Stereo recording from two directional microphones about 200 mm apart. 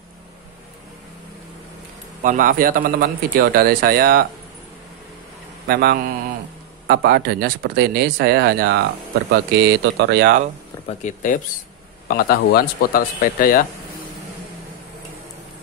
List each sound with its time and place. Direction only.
2.2 s speech: 40° right (ahead or behind)
5.7 s speech: 50° right (ahead or behind)
10.9 s speech: 35° left (ahead or behind)